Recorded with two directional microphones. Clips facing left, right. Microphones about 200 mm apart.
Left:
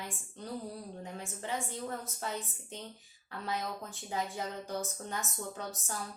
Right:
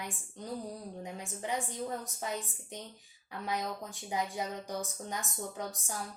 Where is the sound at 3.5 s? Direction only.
15° right (ahead or behind).